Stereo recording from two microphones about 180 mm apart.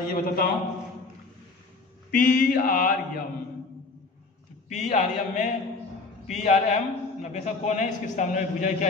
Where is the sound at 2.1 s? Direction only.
50° left (ahead or behind).